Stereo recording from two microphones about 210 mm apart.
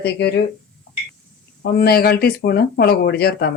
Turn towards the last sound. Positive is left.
turn(degrees=50)  # may be behind; listen again after turning